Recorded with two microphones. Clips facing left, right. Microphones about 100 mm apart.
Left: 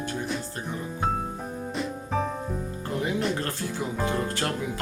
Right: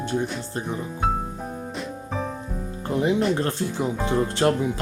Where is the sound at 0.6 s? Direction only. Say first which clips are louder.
Right 3 dB; 5° right (ahead or behind).